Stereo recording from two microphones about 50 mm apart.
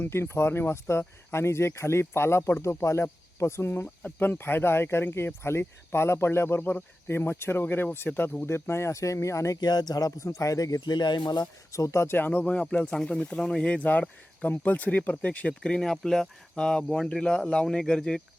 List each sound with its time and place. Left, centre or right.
0.0 s speech: left
4.2 s speech: left
6.6 s speech: left
7.3 s speech: left
8.4 s speech: left
11.7 s speech: left
12.2 s speech: left
12.5 s speech: left
15.6 s speech: centre